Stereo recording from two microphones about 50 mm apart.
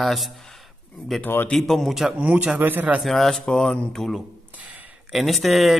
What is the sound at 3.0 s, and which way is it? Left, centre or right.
A man's voice, centre.